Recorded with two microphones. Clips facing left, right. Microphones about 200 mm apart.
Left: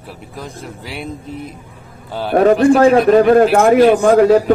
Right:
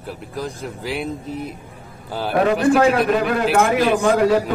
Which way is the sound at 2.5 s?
45° left (ahead or behind).